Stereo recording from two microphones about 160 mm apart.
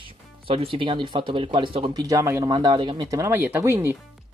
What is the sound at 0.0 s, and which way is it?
Speech, 35° right (ahead or behind).